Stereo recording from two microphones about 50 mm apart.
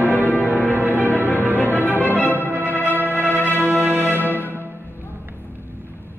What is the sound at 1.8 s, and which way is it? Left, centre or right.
Music, left.